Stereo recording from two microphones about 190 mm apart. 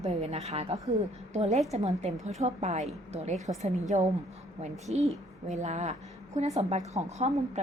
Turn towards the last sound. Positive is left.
turn(degrees=-35)  # may be behind; listen again after turning